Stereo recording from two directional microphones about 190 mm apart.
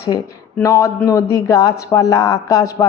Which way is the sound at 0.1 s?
20° left (ahead or behind).